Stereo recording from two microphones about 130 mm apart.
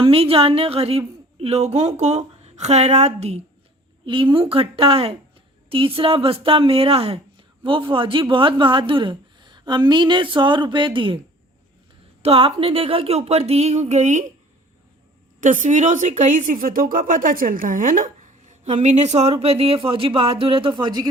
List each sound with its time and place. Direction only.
0.0 s a woman's voice: 45° right (ahead or behind)
4.0 s speech: 40° right (ahead or behind)
12.2 s speech: 45° right (ahead or behind); by 14.3 s 65° right (ahead or behind)
15.4 s speech: 75° right (ahead or behind); by 21.1 s 30° right (ahead or behind)